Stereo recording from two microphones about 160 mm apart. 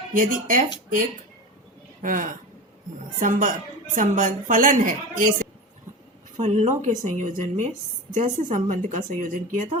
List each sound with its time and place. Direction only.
0.1 s a woman's voice: 55° right (ahead or behind)
2.0 s a woman's voice: 55° right (ahead or behind)